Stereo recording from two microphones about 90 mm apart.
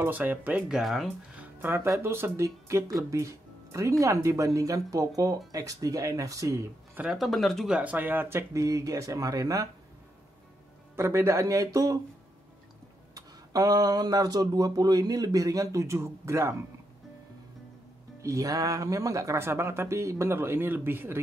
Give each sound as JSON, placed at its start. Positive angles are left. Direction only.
{"t": 0.0, "sound": "speech", "side_deg": -20}
{"t": 0.7, "sound": "speech", "side_deg": 0}
{"t": 1.4, "sound": "music", "side_deg": -20}
{"t": 1.9, "sound": "speech", "side_deg": -30}
{"t": 7.2, "sound": "speech", "side_deg": 0}
{"t": 7.7, "sound": "speech", "side_deg": -15}
{"t": 11.0, "sound": "speech", "side_deg": -30}
{"t": 13.1, "sound": "speech", "side_deg": -45}
{"t": 18.2, "sound": "speech", "side_deg": -35}